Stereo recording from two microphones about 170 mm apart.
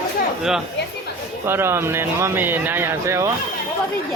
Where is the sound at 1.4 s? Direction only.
15° right (ahead or behind).